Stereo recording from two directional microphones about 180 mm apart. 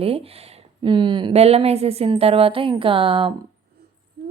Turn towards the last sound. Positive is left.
turn(degrees=-30)  # may be behind; listen again after turning